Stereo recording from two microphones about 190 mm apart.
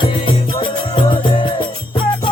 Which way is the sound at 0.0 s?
25° left (ahead or behind).